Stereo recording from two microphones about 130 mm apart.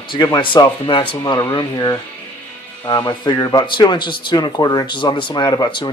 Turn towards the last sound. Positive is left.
turn(degrees=35)  # may be behind; listen again after turning